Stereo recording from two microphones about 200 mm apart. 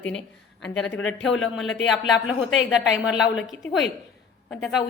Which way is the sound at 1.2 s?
70° left (ahead or behind).